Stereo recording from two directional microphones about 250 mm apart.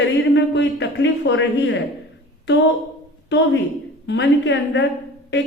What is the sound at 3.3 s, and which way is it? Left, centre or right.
A woman's voice, left.